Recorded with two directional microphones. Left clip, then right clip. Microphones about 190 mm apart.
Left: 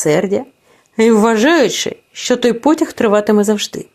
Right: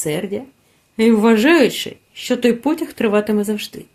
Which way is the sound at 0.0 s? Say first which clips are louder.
Left 9 dB; 25° left (ahead or behind).